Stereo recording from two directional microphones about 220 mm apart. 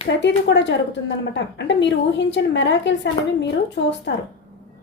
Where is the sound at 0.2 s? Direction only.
55° left (ahead or behind).